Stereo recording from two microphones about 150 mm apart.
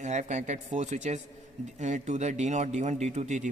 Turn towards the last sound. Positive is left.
turn(degrees=-50)  # may be behind; listen again after turning